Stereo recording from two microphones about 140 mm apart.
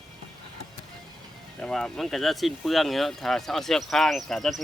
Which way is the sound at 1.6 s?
5° left (ahead or behind).